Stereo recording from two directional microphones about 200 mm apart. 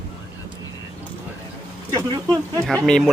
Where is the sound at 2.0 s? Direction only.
20° right (ahead or behind).